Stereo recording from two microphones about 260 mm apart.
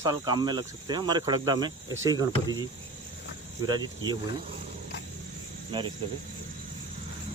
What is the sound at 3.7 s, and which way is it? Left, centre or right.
Speech, centre.